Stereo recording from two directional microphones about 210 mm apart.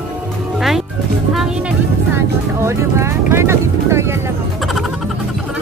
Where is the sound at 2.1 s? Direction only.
10° right (ahead or behind).